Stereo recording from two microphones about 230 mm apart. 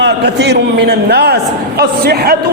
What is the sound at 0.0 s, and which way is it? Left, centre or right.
A man's voice, right.